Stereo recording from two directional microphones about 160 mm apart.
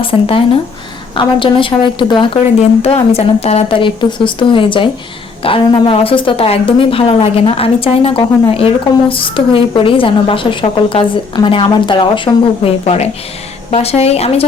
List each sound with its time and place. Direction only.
0.0 s speech: 35° left (ahead or behind)